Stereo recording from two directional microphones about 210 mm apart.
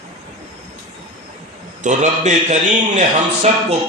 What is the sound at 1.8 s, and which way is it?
A man's voice, 35° right (ahead or behind).